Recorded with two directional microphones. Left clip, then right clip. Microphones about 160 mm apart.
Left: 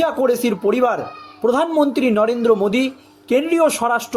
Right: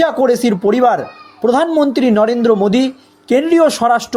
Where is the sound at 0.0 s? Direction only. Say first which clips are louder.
Right 5 dB; 30° right (ahead or behind).